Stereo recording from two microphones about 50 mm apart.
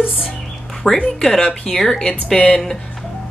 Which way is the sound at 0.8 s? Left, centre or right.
Centre.